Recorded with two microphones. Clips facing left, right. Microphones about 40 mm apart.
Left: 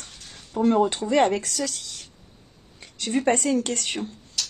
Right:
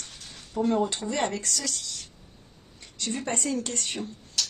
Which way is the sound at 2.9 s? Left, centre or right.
Left.